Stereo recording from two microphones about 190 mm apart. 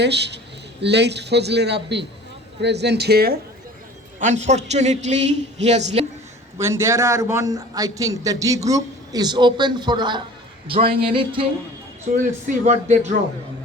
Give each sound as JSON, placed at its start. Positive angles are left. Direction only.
{"t": 0.0, "sound": "a man's voice", "side_deg": -65}
{"t": 4.2, "sound": "a man's voice", "side_deg": -40}
{"t": 6.6, "sound": "a man's voice", "side_deg": -15}
{"t": 12.1, "sound": "a man's voice", "side_deg": -45}